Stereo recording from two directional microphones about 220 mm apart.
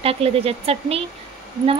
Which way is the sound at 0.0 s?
25° right (ahead or behind).